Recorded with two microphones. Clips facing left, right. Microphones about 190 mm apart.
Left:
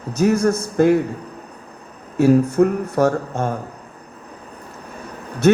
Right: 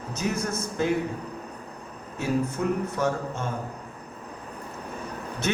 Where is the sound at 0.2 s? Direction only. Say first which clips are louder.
Left 13 dB; 65° left (ahead or behind).